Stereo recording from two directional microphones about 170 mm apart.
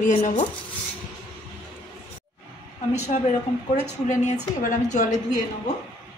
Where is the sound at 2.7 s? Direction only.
40° left (ahead or behind).